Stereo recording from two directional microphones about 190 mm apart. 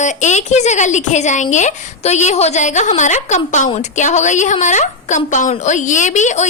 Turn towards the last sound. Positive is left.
turn(degrees=40)  # may be behind; listen again after turning